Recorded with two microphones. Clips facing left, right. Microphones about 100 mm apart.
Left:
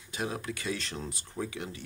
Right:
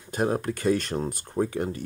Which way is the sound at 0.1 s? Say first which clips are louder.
Right 9 dB; 45° right (ahead or behind).